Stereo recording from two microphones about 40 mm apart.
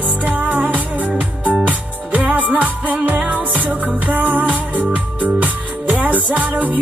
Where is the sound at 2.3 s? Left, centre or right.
Right.